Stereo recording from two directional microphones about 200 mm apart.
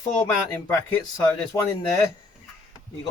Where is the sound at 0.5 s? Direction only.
10° left (ahead or behind).